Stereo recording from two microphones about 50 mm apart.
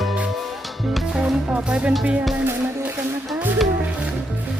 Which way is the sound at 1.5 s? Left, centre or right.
Right.